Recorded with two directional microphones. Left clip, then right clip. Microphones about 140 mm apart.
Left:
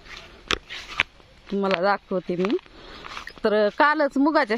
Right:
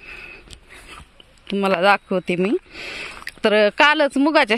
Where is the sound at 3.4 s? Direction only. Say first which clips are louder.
Right 5 dB; 90° right; by 4.6 s 70° right (ahead or behind).